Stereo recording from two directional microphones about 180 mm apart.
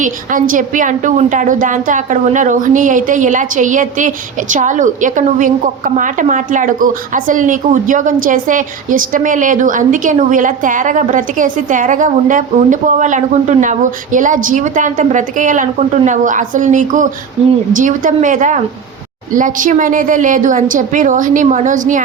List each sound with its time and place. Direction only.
0.0 s a woman's voice: 50° right (ahead or behind)